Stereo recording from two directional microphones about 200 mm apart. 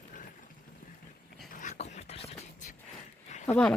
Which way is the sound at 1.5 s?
40° left (ahead or behind).